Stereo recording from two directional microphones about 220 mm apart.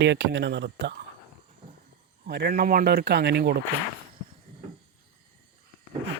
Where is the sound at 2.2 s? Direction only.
45° right (ahead or behind).